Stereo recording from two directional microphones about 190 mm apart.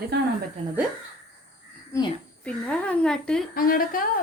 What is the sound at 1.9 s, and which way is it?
A child's voice, 15° left (ahead or behind).